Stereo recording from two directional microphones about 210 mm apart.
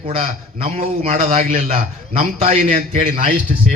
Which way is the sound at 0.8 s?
40° right (ahead or behind).